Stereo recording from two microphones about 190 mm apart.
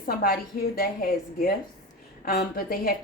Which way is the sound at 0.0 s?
50° left (ahead or behind).